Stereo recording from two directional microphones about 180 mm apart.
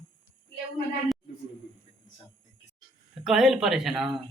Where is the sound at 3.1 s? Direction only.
Centre (ahead or behind).